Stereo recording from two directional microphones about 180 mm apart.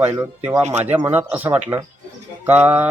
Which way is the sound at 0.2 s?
15° right (ahead or behind).